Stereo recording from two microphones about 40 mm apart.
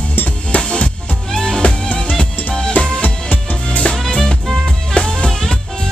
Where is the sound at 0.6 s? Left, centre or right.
Left.